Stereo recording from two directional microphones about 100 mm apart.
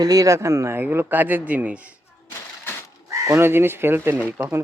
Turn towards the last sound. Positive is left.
turn(degrees=-25)  # may be behind; listen again after turning